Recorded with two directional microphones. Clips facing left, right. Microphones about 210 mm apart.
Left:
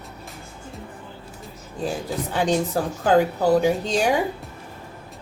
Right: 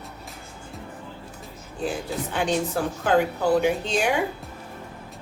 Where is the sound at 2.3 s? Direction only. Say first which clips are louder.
Left 3 dB; 40° left (ahead or behind).